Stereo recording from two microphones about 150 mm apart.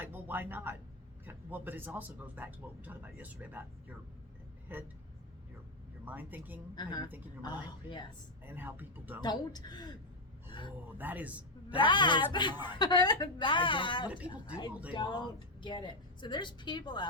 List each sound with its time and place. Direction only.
0.0 s a sound: 10° right (ahead or behind)
1.2 s speech: 10° right (ahead or behind)
6.1 s speech: 10° right (ahead or behind)
6.7 s a woman's voice: 30° left (ahead or behind)
8.4 s speech: 15° right (ahead or behind)
9.2 s a woman's voice: 30° left (ahead or behind)
10.9 s speech: 10° right (ahead or behind)
11.7 s a woman's voice: 30° left (ahead or behind)